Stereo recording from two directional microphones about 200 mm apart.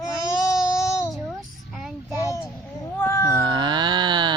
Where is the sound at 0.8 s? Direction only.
15° left (ahead or behind).